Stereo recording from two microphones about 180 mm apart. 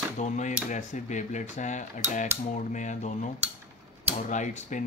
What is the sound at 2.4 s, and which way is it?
Speech, 40° left (ahead or behind).